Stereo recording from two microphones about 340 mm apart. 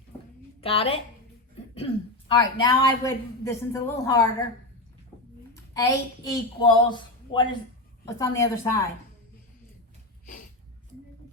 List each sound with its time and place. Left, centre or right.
0.6 s a woman's voice: centre
5.7 s speech: centre